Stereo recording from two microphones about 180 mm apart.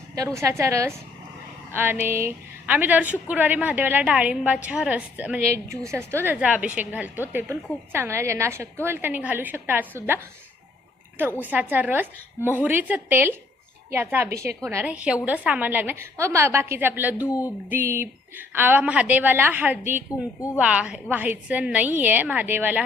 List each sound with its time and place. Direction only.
0.2 s a woman's voice: 15° right (ahead or behind)
11.3 s a woman's voice: 10° right (ahead or behind)
20.1 s a woman's voice: 15° left (ahead or behind)
20.6 s a woman's voice: 5° right (ahead or behind)